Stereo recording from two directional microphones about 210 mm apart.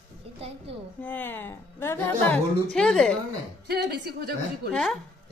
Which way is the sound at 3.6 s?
50° right (ahead or behind).